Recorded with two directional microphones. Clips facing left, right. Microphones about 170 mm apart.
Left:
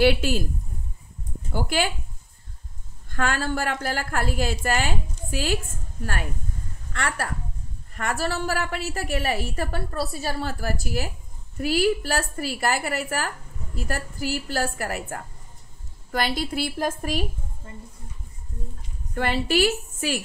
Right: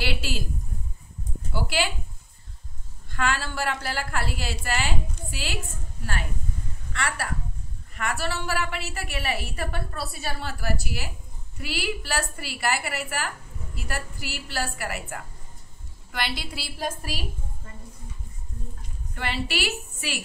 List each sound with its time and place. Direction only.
0.0 s a woman's voice: 50° left (ahead or behind)
1.5 s speech: 50° left (ahead or behind)
3.1 s a woman's voice: 45° left (ahead or behind)
6.9 s a woman's voice: 45° left (ahead or behind)
19.1 s a woman's voice: 45° left (ahead or behind)